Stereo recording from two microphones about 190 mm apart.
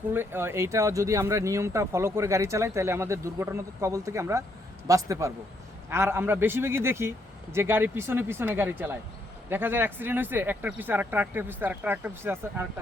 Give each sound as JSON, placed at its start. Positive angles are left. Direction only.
{"t": 0.1, "sound": "speech", "side_deg": -10}